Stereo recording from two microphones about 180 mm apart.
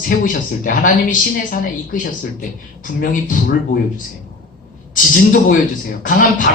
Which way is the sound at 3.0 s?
50° left (ahead or behind).